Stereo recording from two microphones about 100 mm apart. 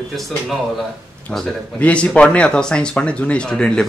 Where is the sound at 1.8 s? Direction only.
10° left (ahead or behind).